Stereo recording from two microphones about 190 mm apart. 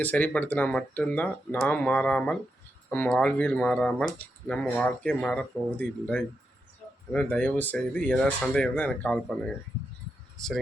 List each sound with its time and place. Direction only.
0.0 s speech: 10° left (ahead or behind)